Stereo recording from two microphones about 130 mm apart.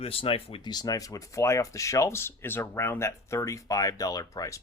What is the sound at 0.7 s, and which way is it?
Speech, 30° left (ahead or behind).